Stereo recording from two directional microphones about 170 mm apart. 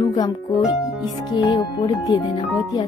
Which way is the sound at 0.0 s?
25° left (ahead or behind).